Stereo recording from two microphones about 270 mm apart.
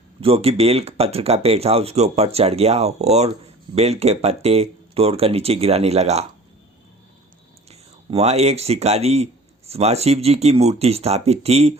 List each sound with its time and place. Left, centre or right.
0.2 s speech: right
7.7 s speech: right